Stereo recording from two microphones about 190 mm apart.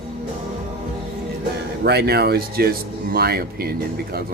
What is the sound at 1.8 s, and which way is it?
Speech, 60° right (ahead or behind).